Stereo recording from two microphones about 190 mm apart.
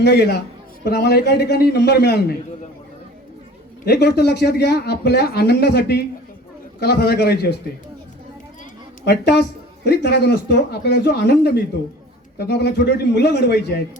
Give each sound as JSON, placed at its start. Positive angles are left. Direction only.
{"t": 0.0, "sound": "speech", "side_deg": 60}
{"t": 3.8, "sound": "speech", "side_deg": 60}
{"t": 9.0, "sound": "speech", "side_deg": 60}